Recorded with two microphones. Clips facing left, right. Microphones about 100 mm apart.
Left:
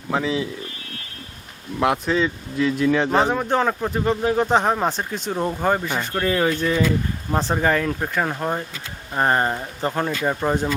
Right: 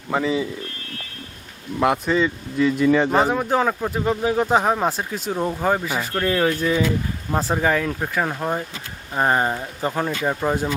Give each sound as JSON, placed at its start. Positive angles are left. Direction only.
{"t": 0.1, "sound": "speech", "side_deg": 0}
{"t": 1.8, "sound": "speech", "side_deg": 0}